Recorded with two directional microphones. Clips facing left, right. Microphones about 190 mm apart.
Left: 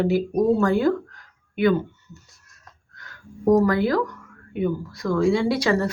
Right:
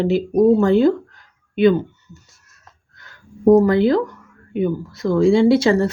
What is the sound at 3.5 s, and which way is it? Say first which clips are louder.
Speech: right 6 dB; 25° right (ahead or behind).